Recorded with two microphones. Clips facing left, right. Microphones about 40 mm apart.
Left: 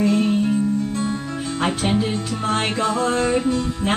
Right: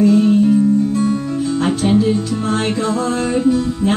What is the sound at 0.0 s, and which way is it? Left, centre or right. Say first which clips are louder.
Music: right 6 dB; centre.